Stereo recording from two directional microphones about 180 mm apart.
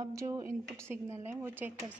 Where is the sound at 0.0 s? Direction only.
20° right (ahead or behind).